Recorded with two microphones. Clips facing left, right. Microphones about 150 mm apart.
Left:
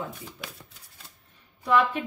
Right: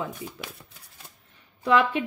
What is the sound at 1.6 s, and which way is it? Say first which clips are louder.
Speech: right 1 dB; 80° right.